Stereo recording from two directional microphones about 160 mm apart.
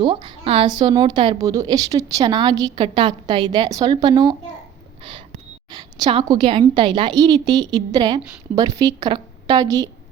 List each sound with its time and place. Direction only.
0.0 s a woman's voice: 30° right (ahead or behind)
5.7 s a woman's voice: 30° right (ahead or behind)